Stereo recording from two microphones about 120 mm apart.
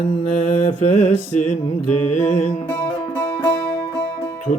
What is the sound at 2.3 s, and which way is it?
Music, 70° left (ahead or behind).